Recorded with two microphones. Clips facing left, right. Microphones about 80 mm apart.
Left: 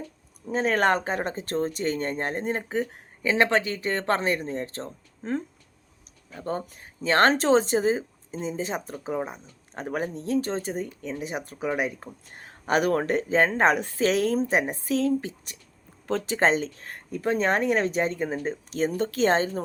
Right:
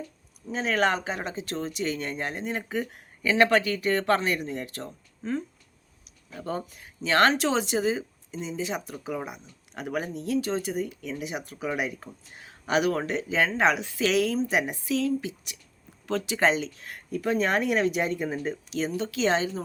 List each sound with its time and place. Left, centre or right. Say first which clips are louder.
0.4 s speech: left 3 dB; left
6.4 s speech: left 2 dB; left